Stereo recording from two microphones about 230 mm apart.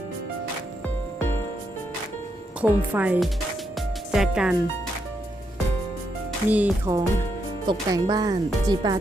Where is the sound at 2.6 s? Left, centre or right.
Centre.